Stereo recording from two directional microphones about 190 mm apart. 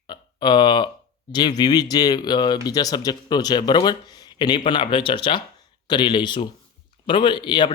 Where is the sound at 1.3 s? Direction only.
20° left (ahead or behind).